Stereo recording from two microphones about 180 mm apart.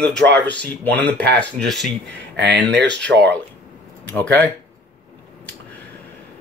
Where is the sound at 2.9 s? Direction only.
5° left (ahead or behind).